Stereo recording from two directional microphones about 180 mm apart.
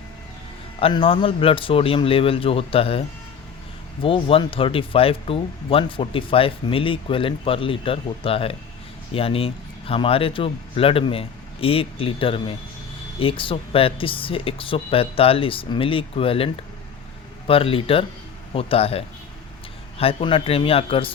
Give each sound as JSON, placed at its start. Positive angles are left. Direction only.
{"t": 0.8, "sound": "speech", "side_deg": 30}
{"t": 4.0, "sound": "speech", "side_deg": 30}